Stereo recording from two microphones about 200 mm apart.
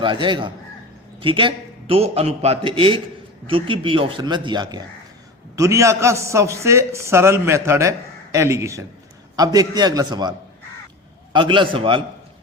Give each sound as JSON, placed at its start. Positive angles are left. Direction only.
{"t": 0.0, "sound": "a man's voice", "side_deg": -25}